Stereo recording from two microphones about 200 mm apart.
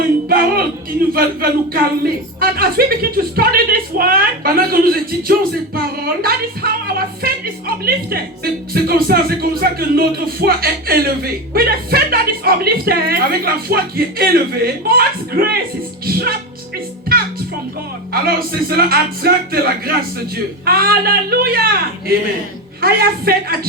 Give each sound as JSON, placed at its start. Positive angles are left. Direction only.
{"t": 0.3, "sound": "speech", "side_deg": -50}
{"t": 18.1, "sound": "speech", "side_deg": -50}